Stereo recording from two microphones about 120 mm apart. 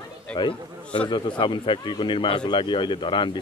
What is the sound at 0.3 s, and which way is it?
Speech, 40° left (ahead or behind).